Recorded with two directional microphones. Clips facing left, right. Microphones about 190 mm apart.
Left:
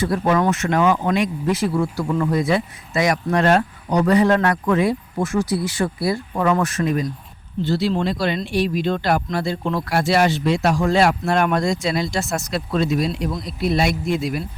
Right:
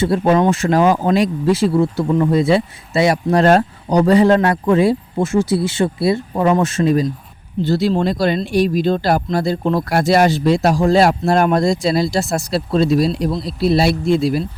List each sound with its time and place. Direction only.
0.0 s speech: 25° right (ahead or behind)
7.6 s speech: 40° right (ahead or behind)